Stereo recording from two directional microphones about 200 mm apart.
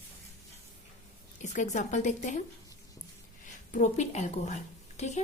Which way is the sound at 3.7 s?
35° left (ahead or behind).